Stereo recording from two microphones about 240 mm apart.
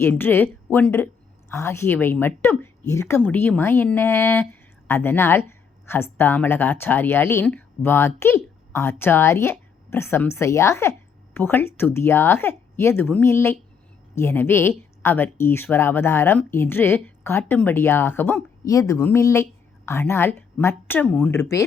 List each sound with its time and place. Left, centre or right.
0.0 s a woman's voice: centre